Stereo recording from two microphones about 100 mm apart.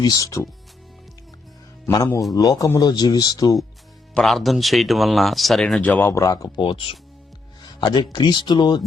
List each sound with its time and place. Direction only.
0.0 s speech: 40° left (ahead or behind)
2.3 s speech: 35° left (ahead or behind)
4.1 s speech: centre (ahead or behind)
5.8 s speech: 15° left (ahead or behind)
6.1 s speech: 30° left (ahead or behind)
6.6 s speech: 55° left (ahead or behind)